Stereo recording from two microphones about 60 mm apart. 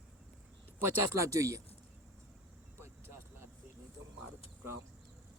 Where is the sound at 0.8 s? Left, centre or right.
Right.